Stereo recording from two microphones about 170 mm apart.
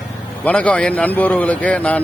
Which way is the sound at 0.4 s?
10° left (ahead or behind).